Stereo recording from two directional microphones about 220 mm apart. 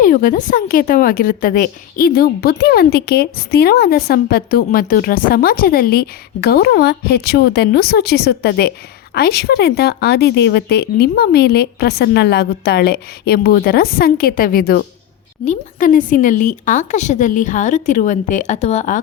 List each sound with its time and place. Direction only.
0.0 s a woman's voice: 35° left (ahead or behind)